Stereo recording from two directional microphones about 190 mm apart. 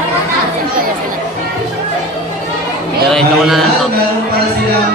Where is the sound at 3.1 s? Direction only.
Centre (ahead or behind).